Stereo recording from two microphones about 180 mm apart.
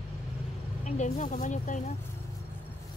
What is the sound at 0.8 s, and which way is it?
Speech, 40° left (ahead or behind).